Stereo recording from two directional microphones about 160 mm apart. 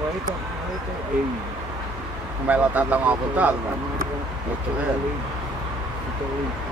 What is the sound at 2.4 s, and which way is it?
Speech, 10° right (ahead or behind).